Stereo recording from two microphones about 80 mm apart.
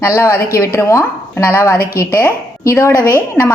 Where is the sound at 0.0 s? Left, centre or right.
Left.